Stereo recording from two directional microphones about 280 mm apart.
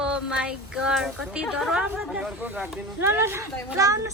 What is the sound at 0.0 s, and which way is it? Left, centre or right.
Speech, centre.